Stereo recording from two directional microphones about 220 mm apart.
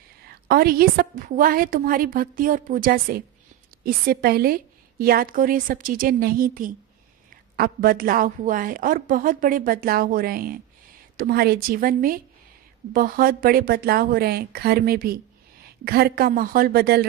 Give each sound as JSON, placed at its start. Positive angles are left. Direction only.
{"t": 0.4, "sound": "a woman's voice", "side_deg": -45}